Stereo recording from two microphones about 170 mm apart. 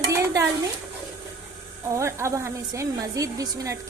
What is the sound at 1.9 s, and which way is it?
A woman's voice, 15° right (ahead or behind).